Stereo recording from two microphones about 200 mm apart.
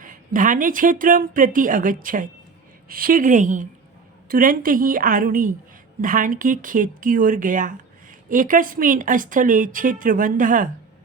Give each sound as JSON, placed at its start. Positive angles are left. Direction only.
{"t": 0.0, "sound": "a woman's voice", "side_deg": -40}